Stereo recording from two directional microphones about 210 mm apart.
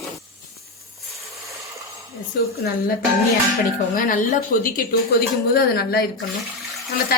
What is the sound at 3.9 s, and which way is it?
Speech, 40° left (ahead or behind).